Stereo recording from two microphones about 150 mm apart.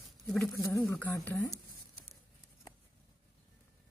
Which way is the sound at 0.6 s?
20° left (ahead or behind).